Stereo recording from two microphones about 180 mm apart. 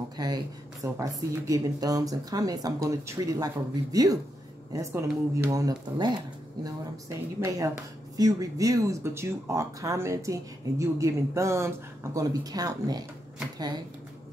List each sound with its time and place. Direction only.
0.2 s speech: 20° right (ahead or behind)